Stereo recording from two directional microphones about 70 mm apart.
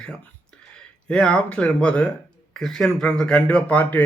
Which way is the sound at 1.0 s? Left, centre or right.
Centre.